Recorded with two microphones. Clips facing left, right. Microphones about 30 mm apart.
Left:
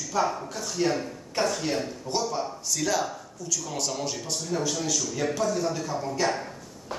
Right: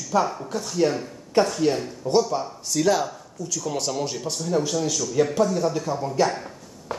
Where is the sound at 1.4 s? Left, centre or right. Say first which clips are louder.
Right 4 dB; centre.